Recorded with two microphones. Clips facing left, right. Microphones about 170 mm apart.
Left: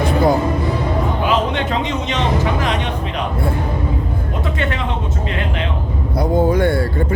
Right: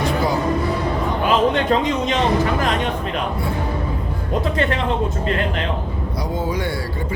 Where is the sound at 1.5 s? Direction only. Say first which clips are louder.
Right 2 dB; 40° right (ahead or behind).